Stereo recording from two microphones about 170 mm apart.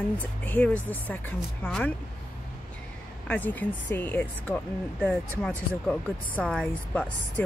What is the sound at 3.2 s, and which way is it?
Speech, 10° left (ahead or behind).